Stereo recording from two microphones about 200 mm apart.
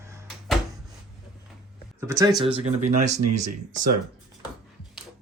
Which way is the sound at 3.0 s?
35° right (ahead or behind).